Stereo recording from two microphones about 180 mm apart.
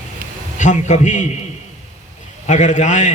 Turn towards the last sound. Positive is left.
turn(degrees=40)  # may be behind; listen again after turning